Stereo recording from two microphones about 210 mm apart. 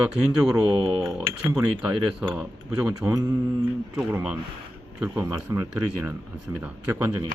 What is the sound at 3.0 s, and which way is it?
Speech, 15° right (ahead or behind).